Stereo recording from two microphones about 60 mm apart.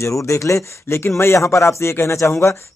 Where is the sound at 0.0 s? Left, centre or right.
Left.